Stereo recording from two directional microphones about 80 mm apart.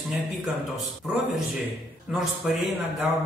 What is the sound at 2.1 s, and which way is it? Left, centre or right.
Speech, centre.